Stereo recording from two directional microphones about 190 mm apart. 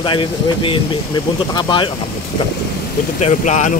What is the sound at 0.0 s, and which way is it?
Speech, 25° left (ahead or behind).